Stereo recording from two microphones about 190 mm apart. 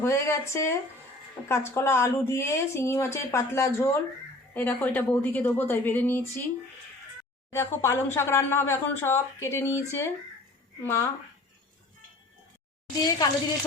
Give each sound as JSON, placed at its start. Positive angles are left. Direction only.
{"t": 0.0, "sound": "speech", "side_deg": 15}
{"t": 7.5, "sound": "speech", "side_deg": 15}
{"t": 13.1, "sound": "speech", "side_deg": 20}